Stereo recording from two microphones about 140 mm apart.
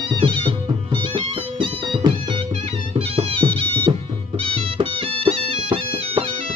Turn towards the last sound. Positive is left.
turn(degrees=-40)  # may be behind; listen again after turning